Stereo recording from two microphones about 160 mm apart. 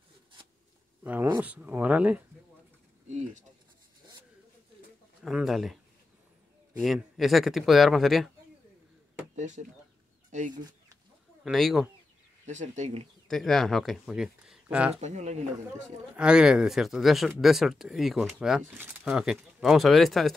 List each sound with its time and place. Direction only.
1.0 s speech: 10° right (ahead or behind)
3.1 s speech: 45° right (ahead or behind)
5.2 s speech: centre (ahead or behind)
6.8 s speech: centre (ahead or behind)
9.3 s speech: 50° right (ahead or behind)
11.4 s speech: centre (ahead or behind)
12.4 s speech: 45° right (ahead or behind)
13.3 s speech: centre (ahead or behind)
15.0 s speech: 45° right (ahead or behind)
16.2 s speech: 5° right (ahead or behind)